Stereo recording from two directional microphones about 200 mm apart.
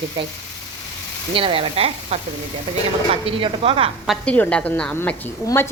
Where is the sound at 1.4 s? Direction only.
25° right (ahead or behind).